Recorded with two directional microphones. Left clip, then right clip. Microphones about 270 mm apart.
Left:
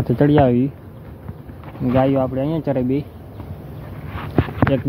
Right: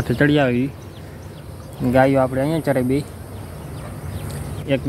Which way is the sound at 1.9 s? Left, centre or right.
Centre.